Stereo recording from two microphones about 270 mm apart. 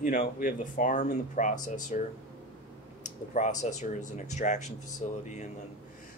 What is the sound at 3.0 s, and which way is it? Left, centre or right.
Speech, left.